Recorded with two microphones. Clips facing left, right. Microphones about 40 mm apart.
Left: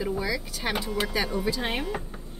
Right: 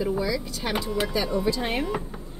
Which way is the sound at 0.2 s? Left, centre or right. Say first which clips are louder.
Right 3 dB; left.